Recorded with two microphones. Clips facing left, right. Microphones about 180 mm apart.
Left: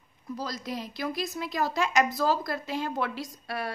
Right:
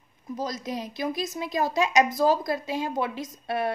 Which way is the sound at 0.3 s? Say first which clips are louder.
Right 3 dB; 20° right (ahead or behind).